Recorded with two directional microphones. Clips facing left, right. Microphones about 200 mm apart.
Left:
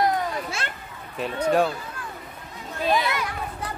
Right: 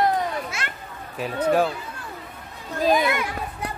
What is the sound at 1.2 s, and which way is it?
Speech, centre (ahead or behind).